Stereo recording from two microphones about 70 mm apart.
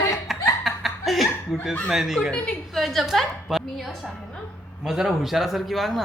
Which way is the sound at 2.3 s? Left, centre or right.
Centre.